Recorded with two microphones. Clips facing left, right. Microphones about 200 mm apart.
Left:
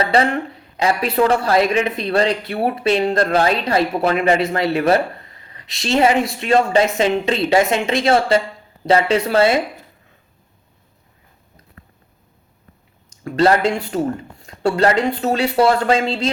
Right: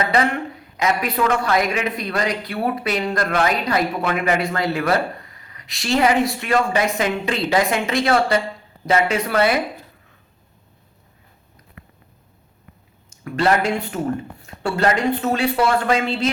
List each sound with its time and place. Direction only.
0.0 s speech: 30° left (ahead or behind)
13.2 s speech: 30° left (ahead or behind)